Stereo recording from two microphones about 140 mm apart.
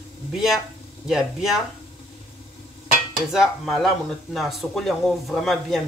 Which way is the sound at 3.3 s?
Centre (ahead or behind).